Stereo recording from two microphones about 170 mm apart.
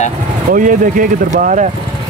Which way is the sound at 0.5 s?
50° right (ahead or behind).